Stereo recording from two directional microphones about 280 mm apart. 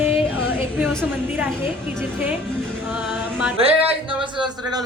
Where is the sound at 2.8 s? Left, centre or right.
Centre.